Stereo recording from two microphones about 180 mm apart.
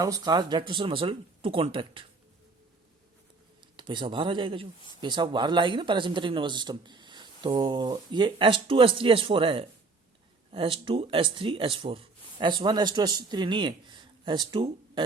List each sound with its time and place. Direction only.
0.0 s speech: 20° right (ahead or behind)
3.8 s speech: 25° right (ahead or behind)